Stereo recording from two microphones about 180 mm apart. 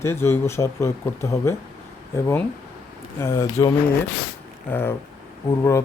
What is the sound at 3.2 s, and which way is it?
Speech, 15° left (ahead or behind).